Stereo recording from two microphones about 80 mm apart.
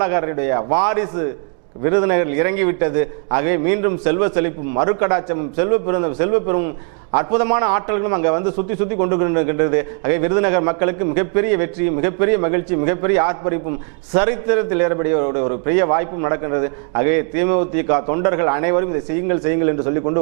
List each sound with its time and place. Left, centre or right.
0.0 s a man's voice: right